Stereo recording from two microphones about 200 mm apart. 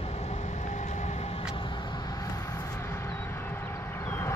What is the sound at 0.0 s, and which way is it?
Vehicle, 30° left (ahead or behind).